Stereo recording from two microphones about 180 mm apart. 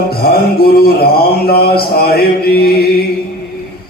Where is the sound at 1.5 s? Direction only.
60° left (ahead or behind).